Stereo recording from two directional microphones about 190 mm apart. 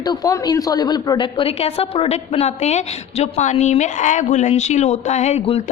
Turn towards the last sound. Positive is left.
turn(degrees=35)  # may be behind; listen again after turning